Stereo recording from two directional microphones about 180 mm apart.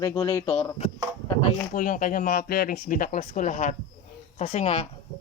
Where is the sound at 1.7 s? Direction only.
50° left (ahead or behind).